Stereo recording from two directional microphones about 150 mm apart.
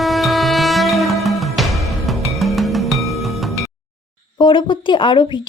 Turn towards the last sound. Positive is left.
turn(degrees=30)  # may be behind; listen again after turning